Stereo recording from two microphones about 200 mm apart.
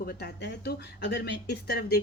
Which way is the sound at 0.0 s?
50° left (ahead or behind).